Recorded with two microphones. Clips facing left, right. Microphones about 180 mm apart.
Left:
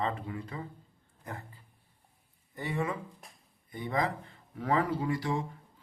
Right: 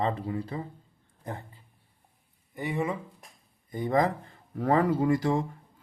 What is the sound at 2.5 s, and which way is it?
Speech, 15° right (ahead or behind).